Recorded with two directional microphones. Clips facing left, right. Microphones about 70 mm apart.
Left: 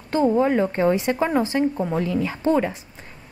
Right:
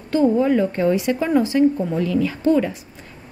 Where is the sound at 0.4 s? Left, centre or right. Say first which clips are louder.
Right 1 dB; left.